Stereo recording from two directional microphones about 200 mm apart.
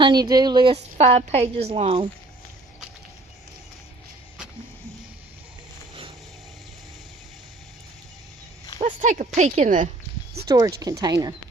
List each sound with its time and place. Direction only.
0.0 s a woman's voice: 20° right (ahead or behind)
8.8 s speech: 35° right (ahead or behind)
10.5 s a woman's voice: 20° right (ahead or behind)